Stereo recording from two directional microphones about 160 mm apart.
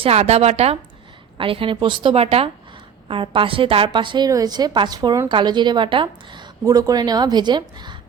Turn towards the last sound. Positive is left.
turn(degrees=-30)  # may be behind; listen again after turning